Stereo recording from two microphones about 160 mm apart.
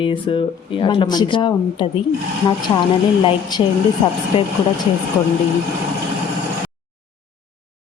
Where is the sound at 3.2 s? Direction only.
25° left (ahead or behind).